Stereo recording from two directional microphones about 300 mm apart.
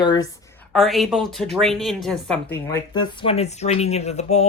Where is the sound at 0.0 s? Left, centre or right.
Centre.